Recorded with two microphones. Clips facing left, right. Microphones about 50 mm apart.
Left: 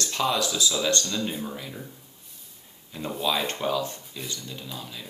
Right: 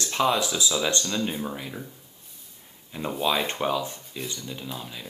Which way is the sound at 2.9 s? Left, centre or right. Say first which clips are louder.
Right 2 dB; centre.